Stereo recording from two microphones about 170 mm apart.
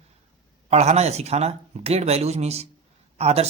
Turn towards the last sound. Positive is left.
turn(degrees=-35)  # may be behind; listen again after turning